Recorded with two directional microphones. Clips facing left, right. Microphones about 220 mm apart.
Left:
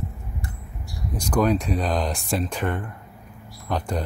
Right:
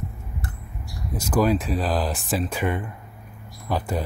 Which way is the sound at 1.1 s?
5° right (ahead or behind).